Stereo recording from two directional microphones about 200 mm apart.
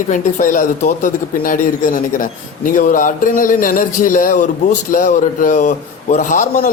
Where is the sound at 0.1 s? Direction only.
40° left (ahead or behind).